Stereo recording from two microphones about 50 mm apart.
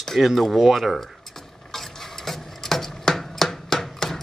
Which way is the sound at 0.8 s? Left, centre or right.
Centre.